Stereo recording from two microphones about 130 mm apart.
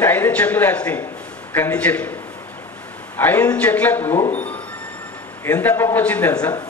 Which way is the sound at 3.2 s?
15° left (ahead or behind).